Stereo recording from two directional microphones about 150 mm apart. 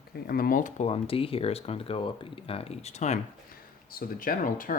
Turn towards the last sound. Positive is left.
turn(degrees=65)  # may be behind; listen again after turning